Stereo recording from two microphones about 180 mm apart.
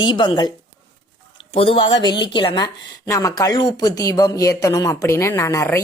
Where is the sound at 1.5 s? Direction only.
30° left (ahead or behind).